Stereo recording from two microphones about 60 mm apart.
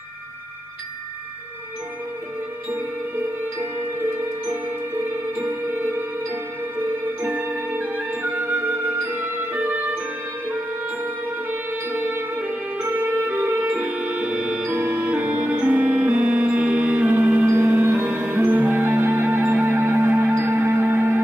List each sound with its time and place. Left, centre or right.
5.4 s music: right
7.3 s music: right
11.5 s music: right
13.2 s music: right
13.7 s music: centre
14.7 s music: right
15.2 s music: centre; by 17.9 s right
17.9 s music: right
18.7 s music: right